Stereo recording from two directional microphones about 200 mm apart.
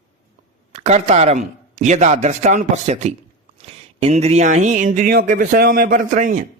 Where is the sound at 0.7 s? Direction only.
35° right (ahead or behind).